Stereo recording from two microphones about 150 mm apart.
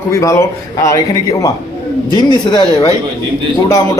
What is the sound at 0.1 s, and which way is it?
A man's voice, 20° left (ahead or behind).